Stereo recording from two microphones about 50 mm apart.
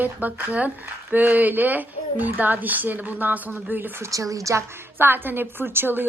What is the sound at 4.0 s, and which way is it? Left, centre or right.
Speech, right.